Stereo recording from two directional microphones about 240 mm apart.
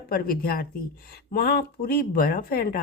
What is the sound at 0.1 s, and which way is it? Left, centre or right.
Speech, left.